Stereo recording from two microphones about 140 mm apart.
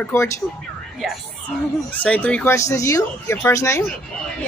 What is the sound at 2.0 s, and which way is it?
Speech, 10° left (ahead or behind).